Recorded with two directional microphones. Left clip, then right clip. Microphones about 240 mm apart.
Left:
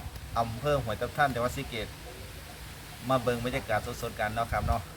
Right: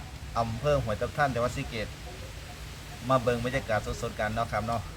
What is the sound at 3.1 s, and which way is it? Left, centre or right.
Speech, centre.